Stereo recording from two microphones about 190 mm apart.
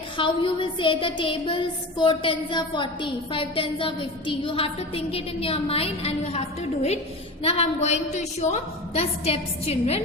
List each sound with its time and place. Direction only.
0.2 s child singing: 25° left (ahead or behind)
7.4 s a woman's voice: 35° left (ahead or behind)